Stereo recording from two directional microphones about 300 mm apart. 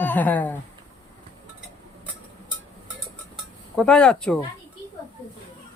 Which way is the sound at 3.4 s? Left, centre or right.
Centre.